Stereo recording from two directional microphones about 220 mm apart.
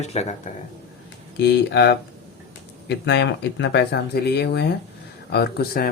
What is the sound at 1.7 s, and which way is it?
Speech, 50° left (ahead or behind).